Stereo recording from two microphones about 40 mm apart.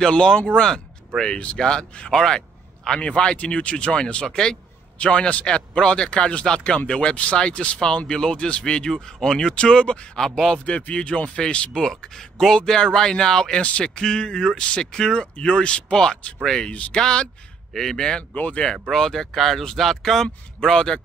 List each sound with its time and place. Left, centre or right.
0.0 s speech: centre
10.2 s speech: centre
10.6 s speech: left
11.8 s speech: centre
13.6 s speech: left
13.9 s speech: centre
17.7 s speech: centre
18.3 s speech: left
18.6 s speech: centre